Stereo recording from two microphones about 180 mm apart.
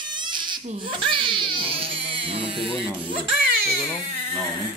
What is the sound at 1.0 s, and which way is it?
Speech, 30° right (ahead or behind).